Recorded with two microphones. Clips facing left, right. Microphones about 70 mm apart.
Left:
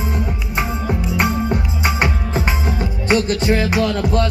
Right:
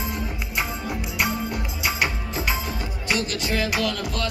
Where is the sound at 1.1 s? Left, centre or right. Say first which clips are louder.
Left 7 dB; left.